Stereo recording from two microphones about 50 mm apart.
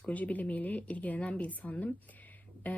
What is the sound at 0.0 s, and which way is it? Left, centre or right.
Speech, left.